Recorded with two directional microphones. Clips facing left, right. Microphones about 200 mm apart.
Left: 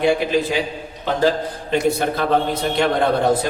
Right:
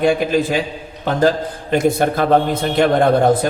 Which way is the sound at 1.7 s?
50° right (ahead or behind).